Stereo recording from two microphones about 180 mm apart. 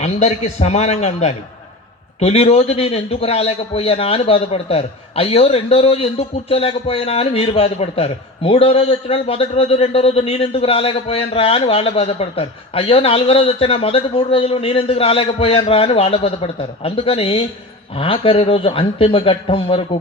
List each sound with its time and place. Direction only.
0.0 s a man's voice: 35° left (ahead or behind)